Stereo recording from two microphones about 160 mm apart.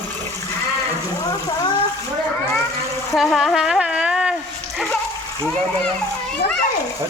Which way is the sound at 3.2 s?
Centre (ahead or behind).